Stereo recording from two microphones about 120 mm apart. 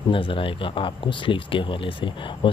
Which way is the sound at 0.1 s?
45° left (ahead or behind).